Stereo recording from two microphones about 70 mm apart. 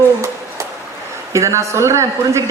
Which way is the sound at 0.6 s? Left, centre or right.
Right.